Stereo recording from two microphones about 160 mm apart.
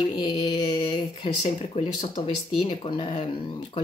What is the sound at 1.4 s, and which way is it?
Speech, 45° left (ahead or behind).